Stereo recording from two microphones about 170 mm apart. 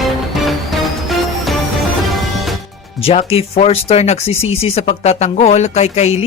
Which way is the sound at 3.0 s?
35° left (ahead or behind).